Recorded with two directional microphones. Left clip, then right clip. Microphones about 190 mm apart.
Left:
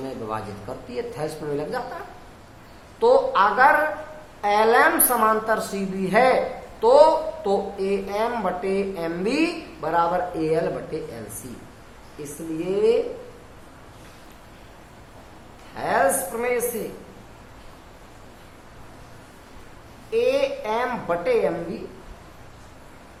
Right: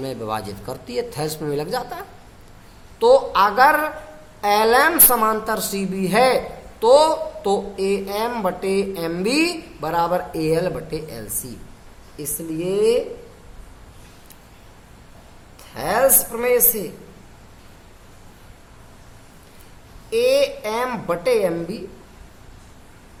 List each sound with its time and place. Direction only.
0.0 s a woman's voice: 50° right (ahead or behind)
3.0 s a woman's voice: 45° right (ahead or behind)
12.2 s a woman's voice: 40° right (ahead or behind)
15.7 s a woman's voice: 45° right (ahead or behind)
20.1 s a woman's voice: 45° right (ahead or behind)